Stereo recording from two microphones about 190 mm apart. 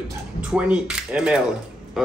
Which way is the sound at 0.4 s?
5° right (ahead or behind).